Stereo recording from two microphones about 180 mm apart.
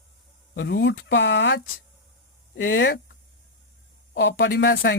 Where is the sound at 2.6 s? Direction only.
90° left.